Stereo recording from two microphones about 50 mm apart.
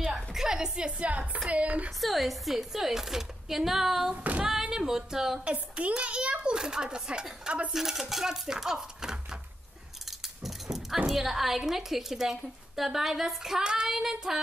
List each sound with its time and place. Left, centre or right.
0.1 s music: centre; by 1.4 s right
1.5 s speech: right
2.0 s a woman's voice: centre
4.1 s singing: right
4.5 s a woman's voice: centre
5.4 s speech: right
7.7 s a woman's voice: centre
10.0 s a sound: centre
11.1 s a woman's voice: centre